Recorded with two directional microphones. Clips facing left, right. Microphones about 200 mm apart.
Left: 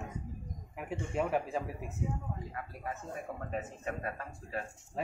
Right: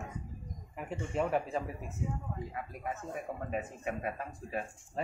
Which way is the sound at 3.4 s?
15° right (ahead or behind).